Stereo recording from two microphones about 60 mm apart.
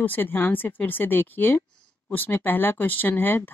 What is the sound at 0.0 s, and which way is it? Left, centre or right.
Speech, left.